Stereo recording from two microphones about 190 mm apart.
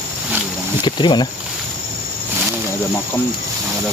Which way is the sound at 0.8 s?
25° left (ahead or behind).